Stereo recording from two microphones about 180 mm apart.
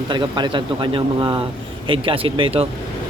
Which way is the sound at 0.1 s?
25° right (ahead or behind).